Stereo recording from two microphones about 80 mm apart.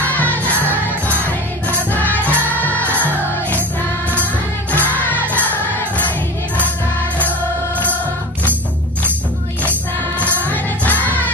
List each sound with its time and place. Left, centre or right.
0.1 s music: centre
1.9 s music: left
4.7 s music: left
10.4 s music: centre